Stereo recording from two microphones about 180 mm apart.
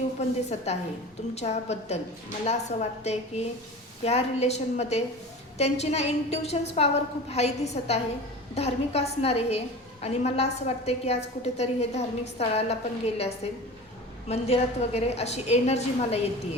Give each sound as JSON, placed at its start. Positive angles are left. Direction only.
{"t": 0.2, "sound": "a woman's voice", "side_deg": 40}